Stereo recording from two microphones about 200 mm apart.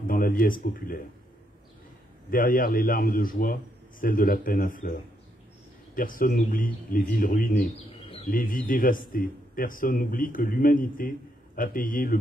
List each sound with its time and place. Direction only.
0.0 s speech: 45° left (ahead or behind)
2.3 s a man's voice: 45° left (ahead or behind)
8.0 s bird: 25° left (ahead or behind)
8.3 s a man's voice: 45° left (ahead or behind)